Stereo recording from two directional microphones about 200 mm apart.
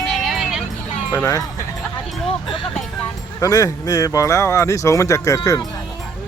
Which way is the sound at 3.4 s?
15° left (ahead or behind).